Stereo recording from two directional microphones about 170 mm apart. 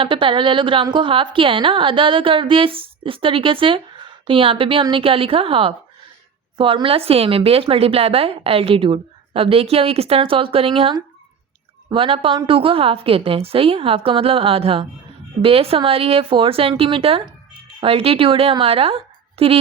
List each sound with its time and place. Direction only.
0.0 s a woman's voice: 30° right (ahead or behind)